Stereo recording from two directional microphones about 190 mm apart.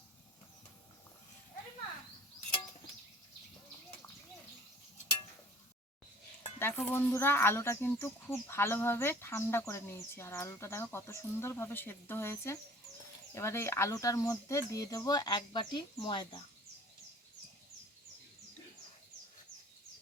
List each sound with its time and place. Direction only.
6.6 s speech: 10° left (ahead or behind)